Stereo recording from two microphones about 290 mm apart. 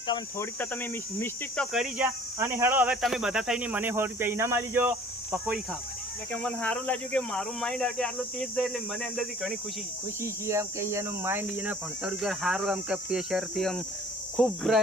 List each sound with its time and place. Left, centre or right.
0.1 s speech: centre
6.3 s speech: centre
10.2 s speech: centre